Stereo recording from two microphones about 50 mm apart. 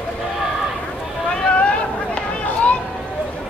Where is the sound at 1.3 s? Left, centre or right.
Left.